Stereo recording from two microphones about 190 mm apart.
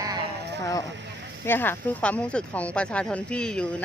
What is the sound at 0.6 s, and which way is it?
A woman's voice, 20° left (ahead or behind).